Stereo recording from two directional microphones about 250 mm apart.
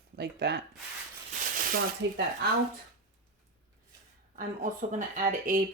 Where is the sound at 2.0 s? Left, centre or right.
Right.